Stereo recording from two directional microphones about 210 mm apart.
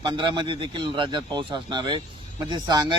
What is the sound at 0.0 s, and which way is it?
Speech, 20° right (ahead or behind).